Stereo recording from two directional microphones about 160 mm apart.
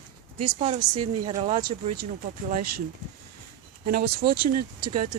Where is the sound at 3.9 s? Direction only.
70° right (ahead or behind).